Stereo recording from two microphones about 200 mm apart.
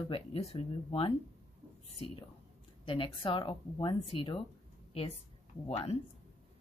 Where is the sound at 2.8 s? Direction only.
25° left (ahead or behind).